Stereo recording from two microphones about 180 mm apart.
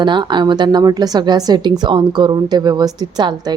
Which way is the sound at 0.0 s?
25° right (ahead or behind).